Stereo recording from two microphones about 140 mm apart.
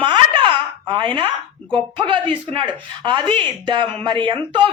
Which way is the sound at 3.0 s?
40° right (ahead or behind).